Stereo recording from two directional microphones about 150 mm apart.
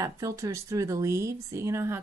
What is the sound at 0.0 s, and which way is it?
Speech, 20° right (ahead or behind).